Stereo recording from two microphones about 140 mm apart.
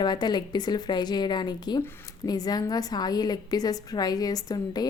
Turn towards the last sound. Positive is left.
turn(degrees=30)  # may be behind; listen again after turning